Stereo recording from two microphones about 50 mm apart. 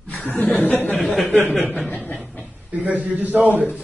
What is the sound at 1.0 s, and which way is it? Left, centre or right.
Speech, centre.